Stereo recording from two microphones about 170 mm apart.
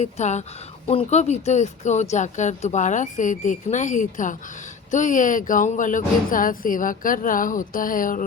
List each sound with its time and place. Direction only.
0.0 s speech: 45° left (ahead or behind)